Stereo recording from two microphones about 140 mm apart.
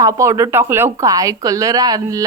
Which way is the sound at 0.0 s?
25° right (ahead or behind).